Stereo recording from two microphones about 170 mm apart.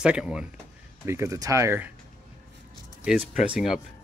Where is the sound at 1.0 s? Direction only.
15° right (ahead or behind).